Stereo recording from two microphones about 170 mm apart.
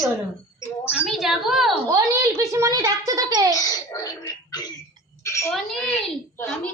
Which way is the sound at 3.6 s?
20° left (ahead or behind).